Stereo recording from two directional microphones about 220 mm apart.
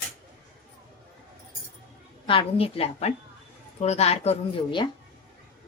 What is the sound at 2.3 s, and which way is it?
Speech, 25° left (ahead or behind).